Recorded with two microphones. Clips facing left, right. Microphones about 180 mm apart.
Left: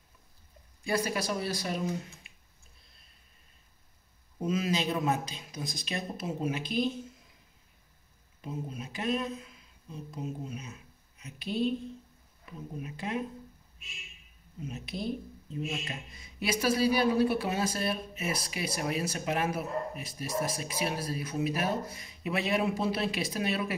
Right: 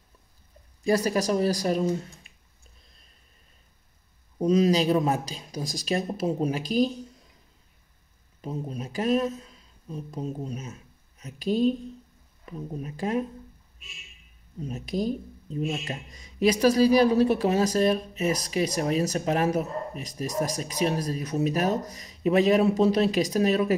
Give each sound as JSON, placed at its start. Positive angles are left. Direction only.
{"t": 0.8, "sound": "speech", "side_deg": -40}
{"t": 4.4, "sound": "speech", "side_deg": -40}
{"t": 8.4, "sound": "speech", "side_deg": -40}
{"t": 12.8, "sound": "speech", "side_deg": -40}
{"t": 14.6, "sound": "speech", "side_deg": -40}